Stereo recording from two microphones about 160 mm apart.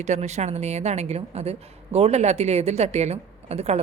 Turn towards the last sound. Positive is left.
turn(degrees=-40)  # may be behind; listen again after turning